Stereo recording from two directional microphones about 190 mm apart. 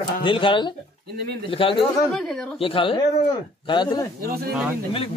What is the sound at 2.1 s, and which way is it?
Speech, 5° left (ahead or behind).